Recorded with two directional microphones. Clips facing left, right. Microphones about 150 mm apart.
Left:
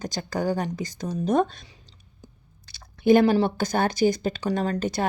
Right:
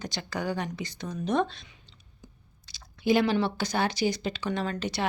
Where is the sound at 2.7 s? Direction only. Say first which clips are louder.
Left 7 dB; 55° left (ahead or behind).